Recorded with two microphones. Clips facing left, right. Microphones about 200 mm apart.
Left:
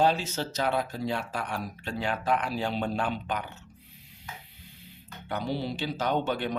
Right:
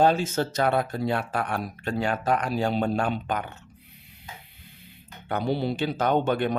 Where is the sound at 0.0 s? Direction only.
50° right (ahead or behind).